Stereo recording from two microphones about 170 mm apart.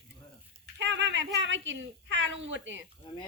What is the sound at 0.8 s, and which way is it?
A woman's voice, 90° right.